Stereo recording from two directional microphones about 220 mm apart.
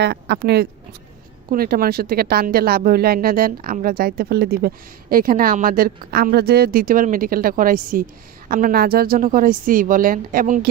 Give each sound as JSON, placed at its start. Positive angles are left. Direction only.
{"t": 0.0, "sound": "a woman's voice", "side_deg": -50}